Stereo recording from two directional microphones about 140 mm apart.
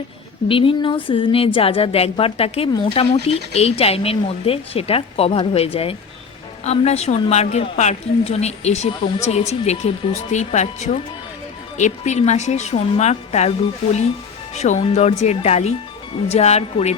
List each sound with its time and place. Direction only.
0.4 s a woman's voice: 40° left (ahead or behind)
14.5 s a woman's voice: 50° left (ahead or behind)